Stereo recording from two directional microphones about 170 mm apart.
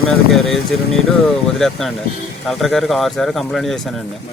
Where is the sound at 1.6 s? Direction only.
Centre (ahead or behind).